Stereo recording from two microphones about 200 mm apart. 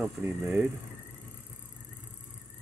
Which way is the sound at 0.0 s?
10° right (ahead or behind).